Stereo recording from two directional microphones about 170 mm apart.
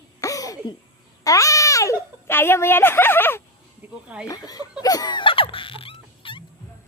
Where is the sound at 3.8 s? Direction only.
10° right (ahead or behind).